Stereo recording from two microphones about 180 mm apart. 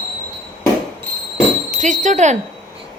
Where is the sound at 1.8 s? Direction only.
45° right (ahead or behind).